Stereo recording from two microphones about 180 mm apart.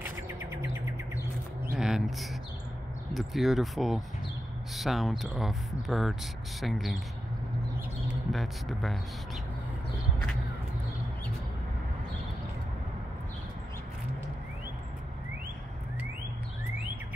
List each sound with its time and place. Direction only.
1.8 s a sound: 5° right (ahead or behind)
3.1 s speech: centre (ahead or behind)
8.3 s speech: centre (ahead or behind)